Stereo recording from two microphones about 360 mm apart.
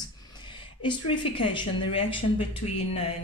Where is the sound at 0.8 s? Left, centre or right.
Centre.